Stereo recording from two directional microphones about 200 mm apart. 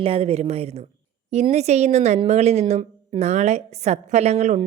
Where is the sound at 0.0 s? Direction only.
30° right (ahead or behind).